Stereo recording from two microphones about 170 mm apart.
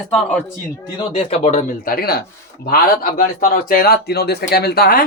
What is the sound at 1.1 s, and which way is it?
Speech, 35° left (ahead or behind).